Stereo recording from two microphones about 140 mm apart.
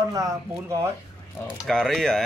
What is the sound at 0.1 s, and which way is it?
Speech, 25° right (ahead or behind).